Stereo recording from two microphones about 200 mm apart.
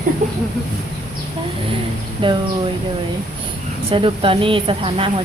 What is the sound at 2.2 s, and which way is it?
Speech, 25° right (ahead or behind).